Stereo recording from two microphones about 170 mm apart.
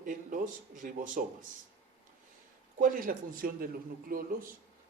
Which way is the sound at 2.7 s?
55° right (ahead or behind).